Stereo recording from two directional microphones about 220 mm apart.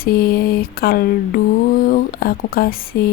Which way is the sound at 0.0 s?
40° left (ahead or behind).